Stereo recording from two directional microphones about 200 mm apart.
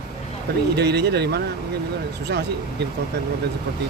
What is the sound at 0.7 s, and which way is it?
Speech, 55° right (ahead or behind).